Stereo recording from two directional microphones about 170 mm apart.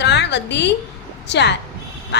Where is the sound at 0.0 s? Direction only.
90° left.